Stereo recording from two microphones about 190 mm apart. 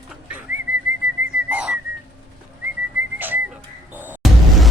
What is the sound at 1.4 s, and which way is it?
Whistling, 5° right (ahead or behind).